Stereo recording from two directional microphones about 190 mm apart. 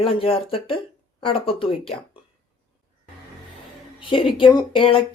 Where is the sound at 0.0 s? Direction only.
30° left (ahead or behind).